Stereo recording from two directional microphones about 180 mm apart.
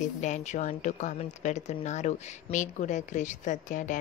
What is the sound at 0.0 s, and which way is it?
Speech, 40° left (ahead or behind).